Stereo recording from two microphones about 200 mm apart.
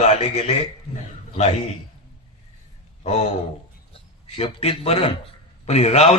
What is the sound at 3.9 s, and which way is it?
A man's voice, 25° left (ahead or behind).